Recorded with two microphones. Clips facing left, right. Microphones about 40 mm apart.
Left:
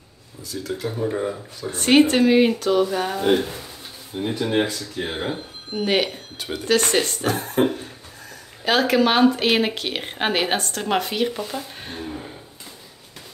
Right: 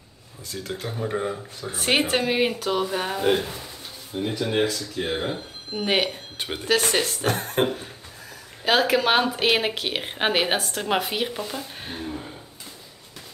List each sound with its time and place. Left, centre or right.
0.5 s speech: right
1.0 s speech: centre
4.3 s speech: centre
5.8 s speech: centre
6.3 s speech: right
6.6 s speech: centre
7.2 s speech: right
7.6 s speech: centre